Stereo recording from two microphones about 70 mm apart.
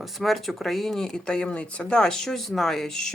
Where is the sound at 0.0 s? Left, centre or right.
Centre.